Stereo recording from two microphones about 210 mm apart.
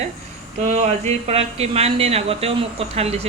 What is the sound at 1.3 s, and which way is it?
A woman's voice, 30° right (ahead or behind).